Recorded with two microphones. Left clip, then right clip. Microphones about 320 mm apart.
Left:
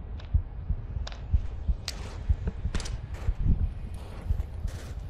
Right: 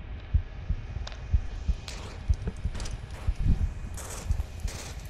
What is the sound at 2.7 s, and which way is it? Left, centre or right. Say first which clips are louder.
Clip-clop: left 2 dB; centre.